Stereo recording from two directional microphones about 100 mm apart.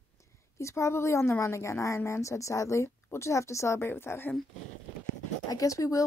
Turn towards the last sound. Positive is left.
turn(degrees=35)  # may be behind; listen again after turning